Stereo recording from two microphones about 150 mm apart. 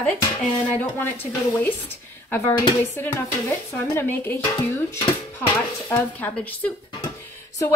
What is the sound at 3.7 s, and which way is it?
Dishes, 15° left (ahead or behind).